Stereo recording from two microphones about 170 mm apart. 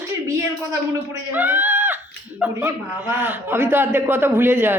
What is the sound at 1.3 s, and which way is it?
Speech, 10° right (ahead or behind).